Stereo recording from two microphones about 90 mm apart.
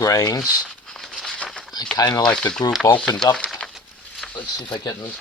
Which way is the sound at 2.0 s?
45° left (ahead or behind).